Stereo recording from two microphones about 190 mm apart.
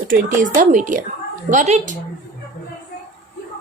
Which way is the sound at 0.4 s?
40° right (ahead or behind).